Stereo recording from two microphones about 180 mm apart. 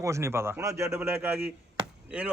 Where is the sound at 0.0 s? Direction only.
15° right (ahead or behind).